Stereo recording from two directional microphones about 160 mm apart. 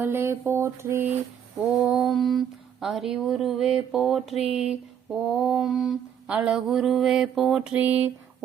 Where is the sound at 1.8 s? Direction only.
Centre (ahead or behind).